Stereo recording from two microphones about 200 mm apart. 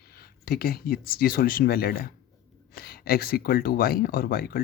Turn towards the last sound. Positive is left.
turn(degrees=50)  # may be behind; listen again after turning